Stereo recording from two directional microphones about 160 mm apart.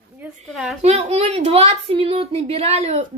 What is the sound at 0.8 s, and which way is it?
Speech, 40° right (ahead or behind).